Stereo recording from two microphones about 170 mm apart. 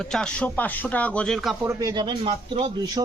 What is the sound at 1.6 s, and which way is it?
A man's voice, 20° right (ahead or behind).